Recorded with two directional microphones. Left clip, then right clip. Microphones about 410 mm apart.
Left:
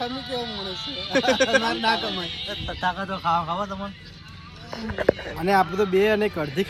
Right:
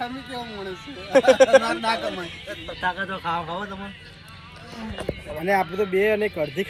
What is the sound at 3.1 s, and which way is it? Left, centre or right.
Speech, centre.